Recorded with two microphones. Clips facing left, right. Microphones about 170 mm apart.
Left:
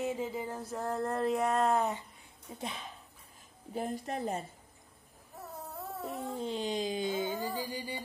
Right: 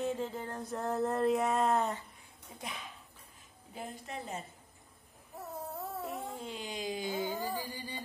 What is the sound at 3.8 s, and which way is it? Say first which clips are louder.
Speech: left 7 dB; 50° left (ahead or behind).